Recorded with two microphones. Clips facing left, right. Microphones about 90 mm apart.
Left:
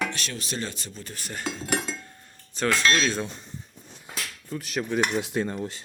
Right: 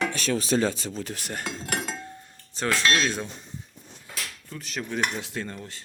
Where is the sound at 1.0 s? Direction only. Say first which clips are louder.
Right 4 dB; 85° right.